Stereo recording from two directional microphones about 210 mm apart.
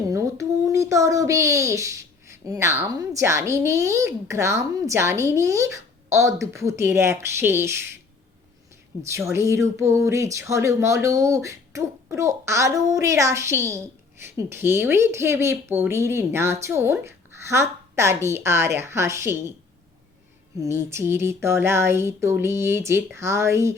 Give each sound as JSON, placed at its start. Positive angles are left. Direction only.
{"t": 0.1, "sound": "a child's voice", "side_deg": -15}
{"t": 9.0, "sound": "a child's voice", "side_deg": -15}
{"t": 20.6, "sound": "a child's voice", "side_deg": -15}